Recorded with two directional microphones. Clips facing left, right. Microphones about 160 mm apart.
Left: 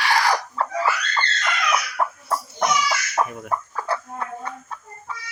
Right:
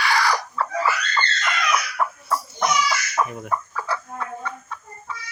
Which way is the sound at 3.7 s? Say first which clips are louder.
Left 1 dB; 45° left (ahead or behind).